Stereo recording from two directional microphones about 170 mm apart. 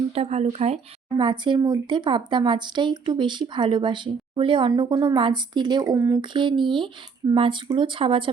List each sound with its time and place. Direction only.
0.1 s speech: 40° right (ahead or behind)